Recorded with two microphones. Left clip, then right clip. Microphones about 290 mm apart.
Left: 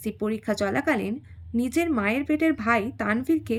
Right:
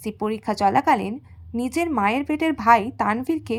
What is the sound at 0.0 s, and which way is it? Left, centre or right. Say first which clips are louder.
A woman's voice: right 3 dB; centre.